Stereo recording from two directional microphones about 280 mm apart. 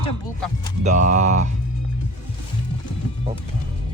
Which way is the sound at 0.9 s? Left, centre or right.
Right.